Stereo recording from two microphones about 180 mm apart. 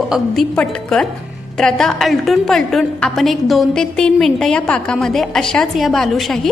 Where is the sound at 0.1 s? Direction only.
5° left (ahead or behind).